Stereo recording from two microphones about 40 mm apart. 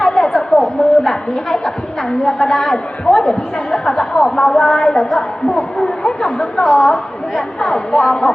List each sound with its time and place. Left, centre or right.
0.0 s a woman's voice: centre